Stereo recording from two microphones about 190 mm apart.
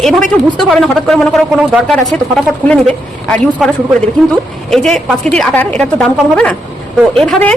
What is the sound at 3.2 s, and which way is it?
Speech, 5° left (ahead or behind).